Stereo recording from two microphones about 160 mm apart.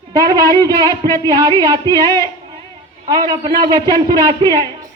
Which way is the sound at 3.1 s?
25° right (ahead or behind).